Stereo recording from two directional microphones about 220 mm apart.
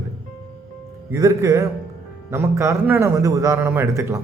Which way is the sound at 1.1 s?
15° right (ahead or behind).